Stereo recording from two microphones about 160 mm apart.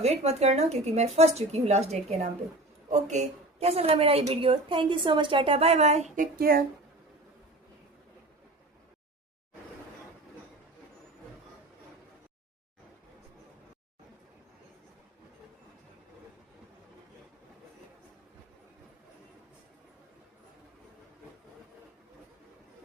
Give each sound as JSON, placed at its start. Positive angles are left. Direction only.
{"t": 0.0, "sound": "a woman's voice", "side_deg": -40}
{"t": 6.4, "sound": "speech", "side_deg": -65}